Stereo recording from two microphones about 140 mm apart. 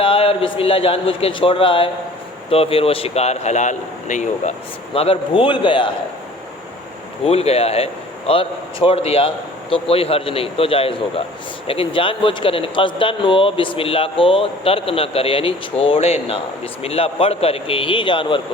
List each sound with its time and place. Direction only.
0.0 s a man's voice: 40° left (ahead or behind); by 4.5 s 60° left (ahead or behind)
4.9 s a man's voice: 40° left (ahead or behind)
7.3 s a man's voice: 45° left (ahead or behind)